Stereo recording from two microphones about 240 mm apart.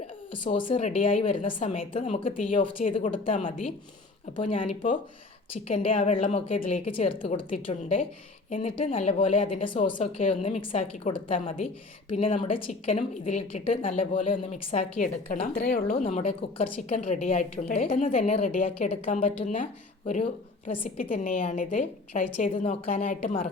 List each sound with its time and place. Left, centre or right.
0.4 s a woman's voice: left
4.7 s a woman's voice: left
16.0 s a woman's voice: left